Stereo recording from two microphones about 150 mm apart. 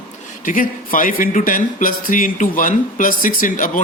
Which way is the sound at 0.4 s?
65° left (ahead or behind).